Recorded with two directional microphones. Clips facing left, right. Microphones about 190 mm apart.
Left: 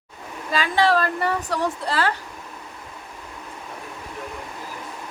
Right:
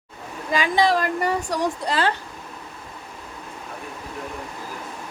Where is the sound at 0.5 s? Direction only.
15° right (ahead or behind).